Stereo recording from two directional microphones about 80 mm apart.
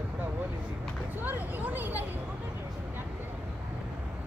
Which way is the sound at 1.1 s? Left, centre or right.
Right.